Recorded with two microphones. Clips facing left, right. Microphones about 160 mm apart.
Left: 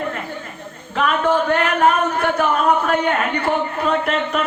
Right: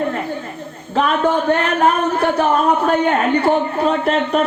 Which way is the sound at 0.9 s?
35° right (ahead or behind).